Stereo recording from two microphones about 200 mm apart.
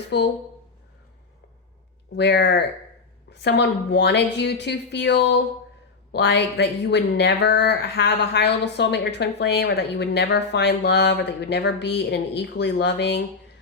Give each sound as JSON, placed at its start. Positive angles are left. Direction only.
{"t": 0.1, "sound": "speech", "side_deg": 60}
{"t": 2.1, "sound": "speech", "side_deg": 55}